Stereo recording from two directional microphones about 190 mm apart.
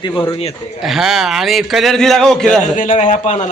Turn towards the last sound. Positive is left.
turn(degrees=40)  # may be behind; listen again after turning